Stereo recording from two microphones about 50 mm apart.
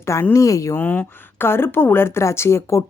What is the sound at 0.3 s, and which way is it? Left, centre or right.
Speech, left.